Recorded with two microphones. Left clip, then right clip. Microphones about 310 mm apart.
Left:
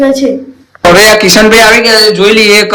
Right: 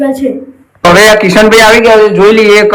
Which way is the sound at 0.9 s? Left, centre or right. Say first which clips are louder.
Even; centre.